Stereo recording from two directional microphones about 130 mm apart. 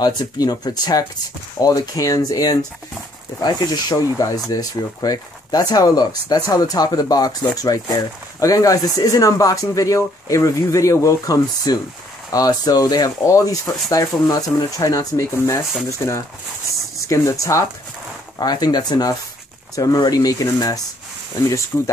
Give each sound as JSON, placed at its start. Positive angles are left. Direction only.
{"t": 0.0, "sound": "speech", "side_deg": 30}
{"t": 21.7, "sound": "speech", "side_deg": 15}